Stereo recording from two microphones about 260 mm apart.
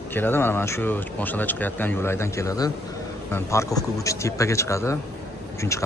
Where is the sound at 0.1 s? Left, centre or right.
Centre.